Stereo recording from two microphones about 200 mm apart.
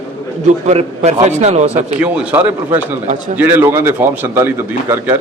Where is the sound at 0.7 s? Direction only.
30° right (ahead or behind).